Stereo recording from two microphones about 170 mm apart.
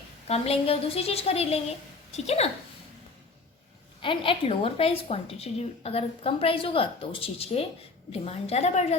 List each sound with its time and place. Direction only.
0.3 s a woman's voice: 35° left (ahead or behind)
4.0 s a woman's voice: 30° left (ahead or behind)